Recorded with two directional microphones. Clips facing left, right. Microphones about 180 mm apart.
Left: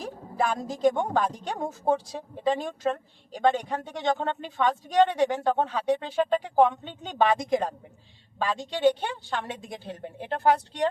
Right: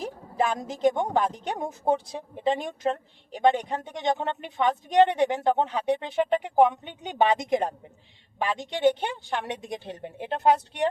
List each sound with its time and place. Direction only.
0.0 s a woman's voice: 20° right (ahead or behind)